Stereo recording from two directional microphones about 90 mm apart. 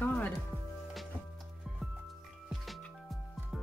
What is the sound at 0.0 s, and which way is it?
Music, 20° left (ahead or behind).